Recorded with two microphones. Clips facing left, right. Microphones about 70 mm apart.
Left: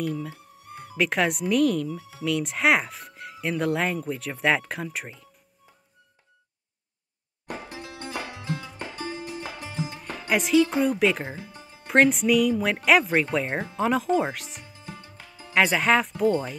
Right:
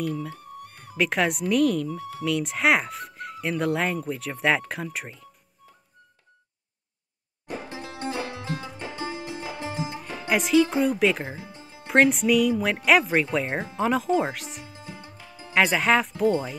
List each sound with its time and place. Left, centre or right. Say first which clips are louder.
0.0 s speech: even; centre
7.7 s music: right 6 dB; right
10.3 s speech: even; centre
11.2 s music: even; centre
11.9 s speech: even; centre
14.7 s music: right 1 dB; centre
15.5 s speech: even; centre